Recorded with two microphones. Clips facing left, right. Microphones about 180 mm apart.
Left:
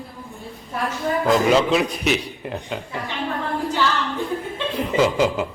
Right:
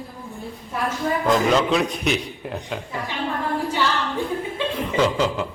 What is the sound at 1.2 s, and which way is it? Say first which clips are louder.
A man's voice: left 2 dB; centre (ahead or behind).